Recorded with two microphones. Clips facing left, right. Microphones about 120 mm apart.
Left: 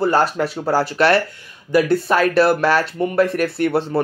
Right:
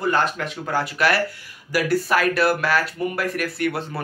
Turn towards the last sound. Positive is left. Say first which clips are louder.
# left 6 dB
turn(degrees=30)  # may be behind; listen again after turning